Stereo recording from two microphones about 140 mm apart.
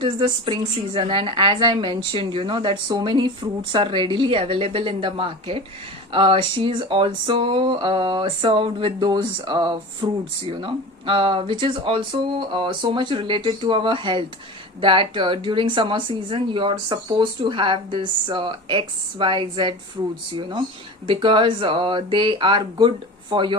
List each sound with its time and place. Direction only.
0.0 s a woman's voice: 35° right (ahead or behind)
21.1 s a woman's voice: 35° right (ahead or behind)